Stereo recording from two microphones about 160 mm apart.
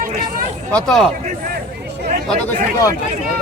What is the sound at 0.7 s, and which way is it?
Speech, centre (ahead or behind).